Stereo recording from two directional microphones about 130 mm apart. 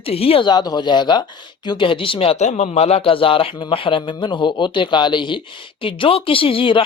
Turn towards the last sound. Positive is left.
turn(degrees=40)  # may be behind; listen again after turning